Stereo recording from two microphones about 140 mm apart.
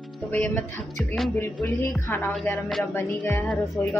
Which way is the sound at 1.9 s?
20° left (ahead or behind).